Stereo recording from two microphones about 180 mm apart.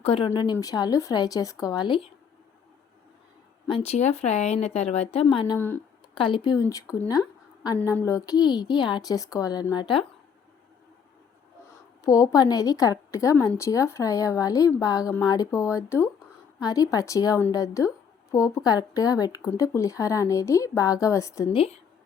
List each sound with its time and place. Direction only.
0.0 s speech: 30° left (ahead or behind)
0.3 s a woman's voice: 20° left (ahead or behind)
3.7 s speech: 30° left (ahead or behind)
5.2 s a woman's voice: 25° left (ahead or behind)
5.5 s a woman's voice: 10° left (ahead or behind)
6.1 s a woman's voice: 25° left (ahead or behind)
12.0 s a woman's voice: 20° left (ahead or behind)
21.5 s speech: 30° left (ahead or behind)